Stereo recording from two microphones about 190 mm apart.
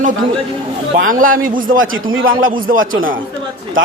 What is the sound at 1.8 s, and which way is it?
A man's voice, 90° right.